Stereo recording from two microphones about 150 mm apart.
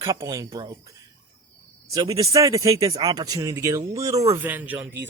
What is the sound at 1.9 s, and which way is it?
Speech, 20° right (ahead or behind).